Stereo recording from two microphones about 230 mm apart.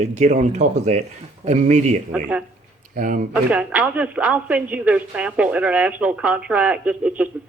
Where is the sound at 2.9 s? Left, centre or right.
Right.